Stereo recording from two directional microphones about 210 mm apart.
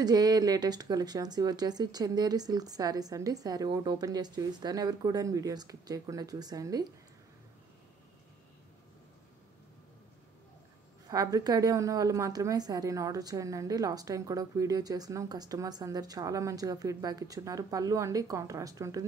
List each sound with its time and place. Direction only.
0.0 s a woman's voice: 20° right (ahead or behind)
11.1 s a woman's voice: 15° right (ahead or behind)